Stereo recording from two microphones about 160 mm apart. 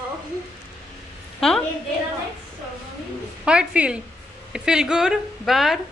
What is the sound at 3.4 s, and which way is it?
A woman's voice, 5° right (ahead or behind).